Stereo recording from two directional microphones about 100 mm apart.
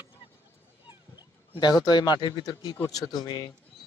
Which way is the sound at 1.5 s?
45° left (ahead or behind).